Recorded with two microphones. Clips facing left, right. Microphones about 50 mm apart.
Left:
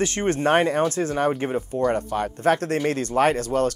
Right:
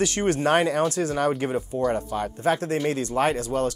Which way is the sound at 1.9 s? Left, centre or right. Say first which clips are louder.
Left 2 dB; left.